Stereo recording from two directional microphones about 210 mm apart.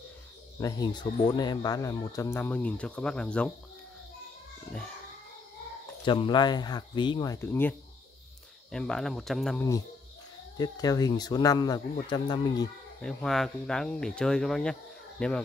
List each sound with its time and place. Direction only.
0.6 s speech: 15° left (ahead or behind)
6.0 s speech: 20° left (ahead or behind)
8.7 s speech: 5° left (ahead or behind)
10.6 s speech: 15° left (ahead or behind)
13.0 s speech: centre (ahead or behind)